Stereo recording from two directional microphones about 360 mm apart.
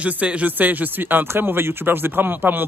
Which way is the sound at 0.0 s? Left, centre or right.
Centre.